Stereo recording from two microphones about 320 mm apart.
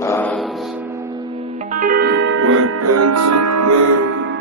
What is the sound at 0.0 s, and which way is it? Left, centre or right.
Music, centre.